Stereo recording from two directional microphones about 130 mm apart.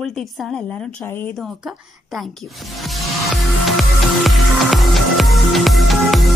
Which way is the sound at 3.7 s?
Centre (ahead or behind).